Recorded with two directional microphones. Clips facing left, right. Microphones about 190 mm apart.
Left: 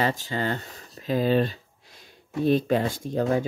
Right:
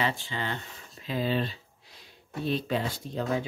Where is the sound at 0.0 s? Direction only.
40° left (ahead or behind).